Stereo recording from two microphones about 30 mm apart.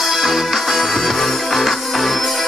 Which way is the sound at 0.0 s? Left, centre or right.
Centre.